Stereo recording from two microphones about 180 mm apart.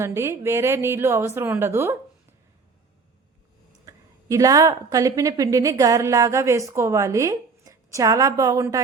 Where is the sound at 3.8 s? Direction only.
20° right (ahead or behind).